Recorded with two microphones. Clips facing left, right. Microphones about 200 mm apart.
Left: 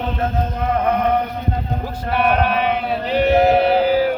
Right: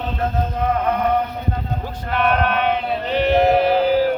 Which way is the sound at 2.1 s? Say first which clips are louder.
Left 1 dB; 5° left (ahead or behind).